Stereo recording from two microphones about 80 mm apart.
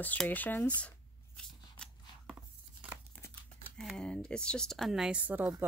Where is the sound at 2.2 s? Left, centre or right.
Centre.